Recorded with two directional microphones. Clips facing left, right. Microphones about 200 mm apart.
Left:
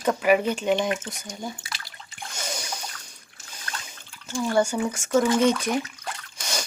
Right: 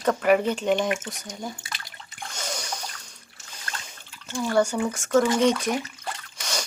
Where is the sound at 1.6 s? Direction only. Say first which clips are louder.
Even; 20° right (ahead or behind).